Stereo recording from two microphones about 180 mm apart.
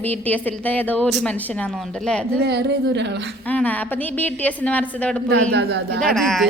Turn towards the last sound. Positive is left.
turn(degrees=0)  # may be behind; listen again after turning